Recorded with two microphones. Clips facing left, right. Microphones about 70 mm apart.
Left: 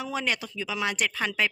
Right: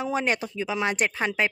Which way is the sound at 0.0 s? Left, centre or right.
Right.